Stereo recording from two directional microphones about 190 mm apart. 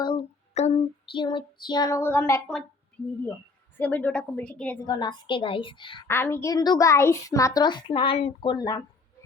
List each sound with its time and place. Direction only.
0.0 s a sound: 25° left (ahead or behind)
1.1 s a woman's voice: 25° left (ahead or behind)
3.8 s a woman's voice: 10° left (ahead or behind)
4.9 s a woman's voice: 20° left (ahead or behind)
6.1 s a woman's voice: 10° left (ahead or behind)